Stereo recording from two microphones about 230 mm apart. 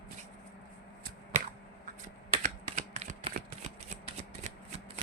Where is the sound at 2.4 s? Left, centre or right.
Right.